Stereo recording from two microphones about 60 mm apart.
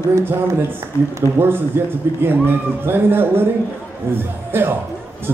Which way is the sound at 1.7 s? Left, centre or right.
Right.